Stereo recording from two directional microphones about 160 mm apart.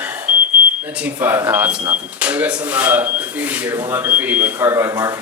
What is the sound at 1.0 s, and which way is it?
Speech, 10° right (ahead or behind).